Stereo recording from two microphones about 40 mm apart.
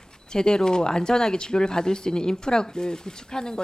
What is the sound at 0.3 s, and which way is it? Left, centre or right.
Speech, centre.